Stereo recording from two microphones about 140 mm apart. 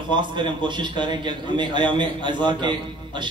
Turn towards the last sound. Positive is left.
turn(degrees=-35)  # may be behind; listen again after turning